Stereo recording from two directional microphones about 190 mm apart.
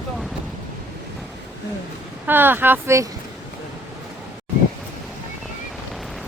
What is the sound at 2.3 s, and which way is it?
Speech, 10° right (ahead or behind).